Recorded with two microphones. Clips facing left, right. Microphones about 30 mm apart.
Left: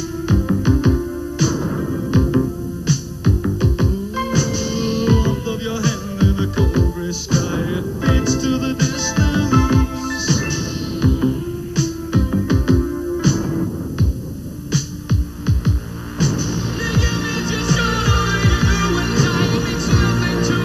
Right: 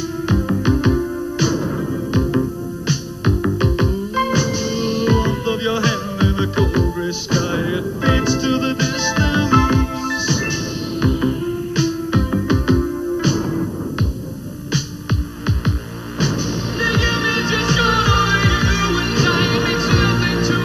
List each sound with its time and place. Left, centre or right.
0.3 s music: centre
1.7 s hum: centre
2.9 s music: right
5.5 s music: right; by 10.5 s centre
11.0 s music: right
14.7 s music: right